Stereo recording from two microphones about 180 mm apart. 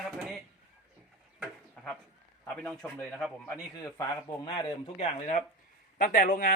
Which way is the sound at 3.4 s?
15° left (ahead or behind).